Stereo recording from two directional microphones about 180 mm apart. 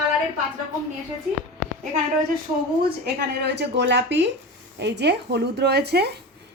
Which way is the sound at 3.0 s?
65° right (ahead or behind).